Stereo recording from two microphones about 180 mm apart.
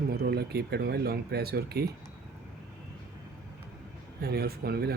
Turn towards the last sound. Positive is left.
turn(degrees=-60)  # may be behind; listen again after turning